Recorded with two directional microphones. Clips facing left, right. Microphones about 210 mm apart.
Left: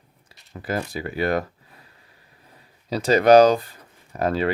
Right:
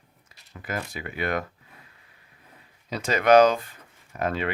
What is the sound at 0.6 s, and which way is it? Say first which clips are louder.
Speech: left 6 dB; 35° left (ahead or behind).